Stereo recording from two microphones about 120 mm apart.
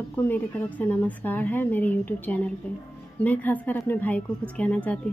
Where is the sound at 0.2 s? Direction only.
15° left (ahead or behind).